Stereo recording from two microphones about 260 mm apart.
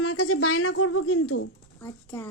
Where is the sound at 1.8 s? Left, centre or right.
Centre.